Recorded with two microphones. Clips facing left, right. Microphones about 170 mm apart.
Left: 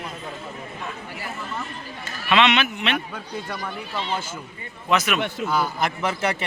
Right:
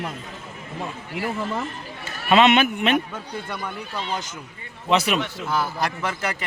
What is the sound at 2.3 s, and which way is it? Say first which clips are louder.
Speech: right 3 dB; 45° right (ahead or behind).